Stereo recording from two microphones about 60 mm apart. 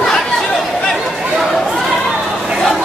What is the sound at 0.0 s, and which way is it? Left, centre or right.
Chatter, centre.